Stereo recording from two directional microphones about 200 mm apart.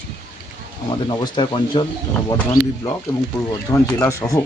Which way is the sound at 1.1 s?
25° left (ahead or behind).